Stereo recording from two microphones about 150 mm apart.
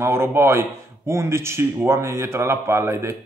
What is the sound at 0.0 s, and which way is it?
Speech, 15° right (ahead or behind).